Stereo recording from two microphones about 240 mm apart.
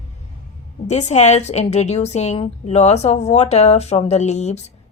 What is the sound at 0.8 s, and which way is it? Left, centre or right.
A woman's voice, left.